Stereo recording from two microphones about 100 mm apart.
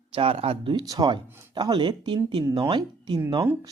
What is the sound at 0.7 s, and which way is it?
Speech, 40° right (ahead or behind).